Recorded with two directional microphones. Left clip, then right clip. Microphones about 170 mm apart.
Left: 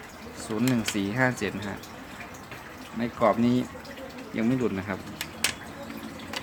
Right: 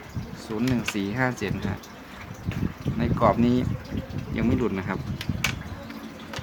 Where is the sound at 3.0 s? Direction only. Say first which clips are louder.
Right 2 dB; 20° right (ahead or behind).